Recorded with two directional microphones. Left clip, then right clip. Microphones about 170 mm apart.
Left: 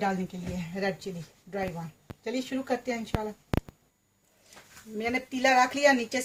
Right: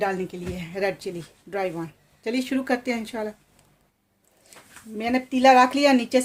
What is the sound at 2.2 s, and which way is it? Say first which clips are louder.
Speech: right 6 dB; 60° right (ahead or behind).